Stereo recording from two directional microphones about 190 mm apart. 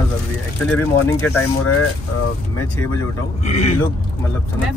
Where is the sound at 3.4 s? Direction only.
35° left (ahead or behind).